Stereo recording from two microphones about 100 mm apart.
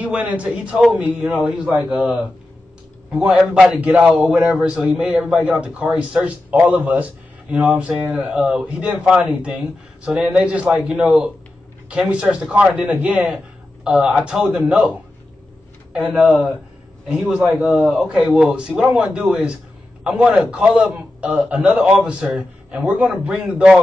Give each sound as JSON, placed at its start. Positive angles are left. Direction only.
{"t": 0.0, "sound": "a man's voice", "side_deg": -15}
{"t": 0.7, "sound": "a man's voice", "side_deg": -5}
{"t": 15.9, "sound": "a man's voice", "side_deg": -5}